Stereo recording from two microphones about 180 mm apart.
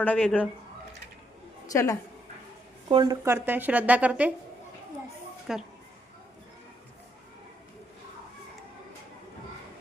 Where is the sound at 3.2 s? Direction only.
10° right (ahead or behind).